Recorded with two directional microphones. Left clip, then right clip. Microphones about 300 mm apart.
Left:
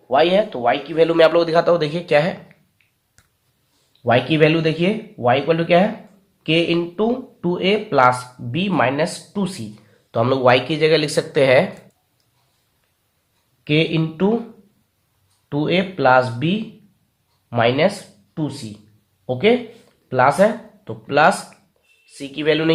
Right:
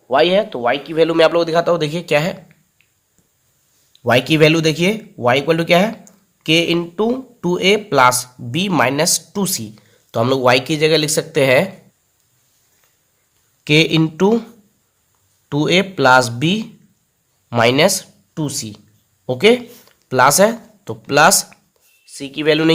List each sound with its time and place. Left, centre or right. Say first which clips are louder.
0.1 s speech: right 2 dB; right
4.0 s speech: right 3 dB; right
13.7 s speech: right 5 dB; right
15.4 s speech: right 4 dB; right